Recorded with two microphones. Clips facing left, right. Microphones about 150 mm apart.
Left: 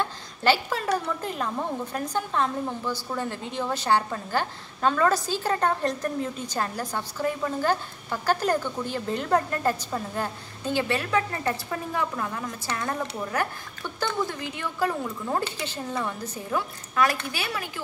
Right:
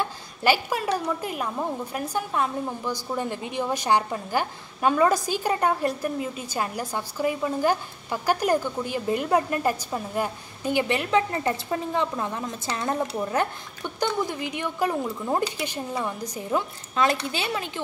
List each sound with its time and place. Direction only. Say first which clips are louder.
0.0 s a woman's voice: even; 10° right (ahead or behind)